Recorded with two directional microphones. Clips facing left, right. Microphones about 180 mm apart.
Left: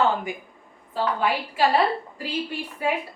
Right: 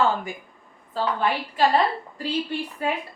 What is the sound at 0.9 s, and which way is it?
Speech, 10° left (ahead or behind).